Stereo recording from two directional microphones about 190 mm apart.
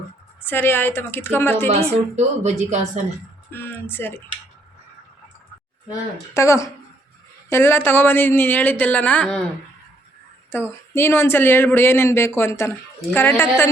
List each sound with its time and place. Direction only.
0.4 s speech: 10° left (ahead or behind)
2.1 s speech: 35° right (ahead or behind)
3.5 s speech: 10° left (ahead or behind)
6.3 s speech: 15° left (ahead or behind)
10.5 s speech: 10° left (ahead or behind)